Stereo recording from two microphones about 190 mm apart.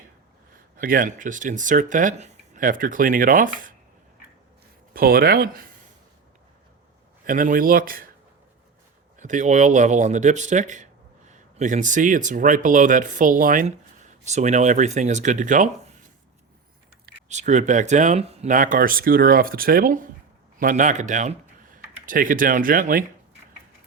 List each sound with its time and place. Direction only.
0.8 s speech: 45° right (ahead or behind)
4.9 s speech: 50° right (ahead or behind)
7.3 s speech: 45° right (ahead or behind)
9.1 s speech: 40° right (ahead or behind)
17.2 s speech: 40° right (ahead or behind)